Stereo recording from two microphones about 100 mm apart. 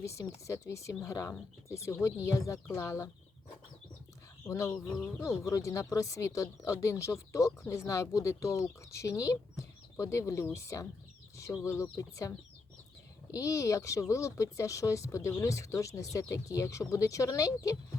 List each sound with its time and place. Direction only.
0.0 s speech: 30° left (ahead or behind)
4.4 s speech: 30° left (ahead or behind)
13.3 s speech: 35° left (ahead or behind)